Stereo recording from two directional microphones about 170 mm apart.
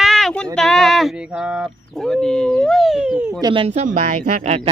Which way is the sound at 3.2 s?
25° right (ahead or behind).